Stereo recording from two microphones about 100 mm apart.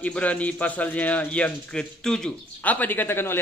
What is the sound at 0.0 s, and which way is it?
A man's voice, 15° left (ahead or behind).